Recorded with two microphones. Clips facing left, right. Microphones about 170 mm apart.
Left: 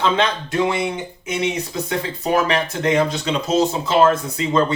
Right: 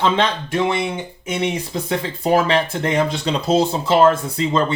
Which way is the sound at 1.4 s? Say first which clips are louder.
Even; 30° right (ahead or behind).